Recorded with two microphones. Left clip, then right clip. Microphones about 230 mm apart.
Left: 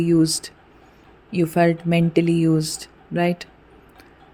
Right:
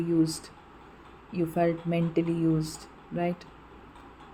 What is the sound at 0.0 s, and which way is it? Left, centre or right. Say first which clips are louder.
Speech: left 8 dB; left.